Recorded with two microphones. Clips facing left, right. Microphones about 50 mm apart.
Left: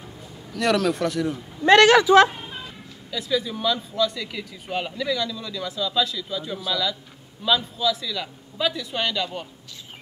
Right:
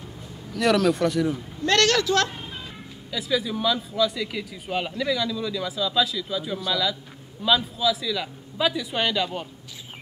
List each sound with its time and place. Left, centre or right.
0.5 s speech: centre
1.6 s a woman's voice: centre
3.1 s a man's voice: centre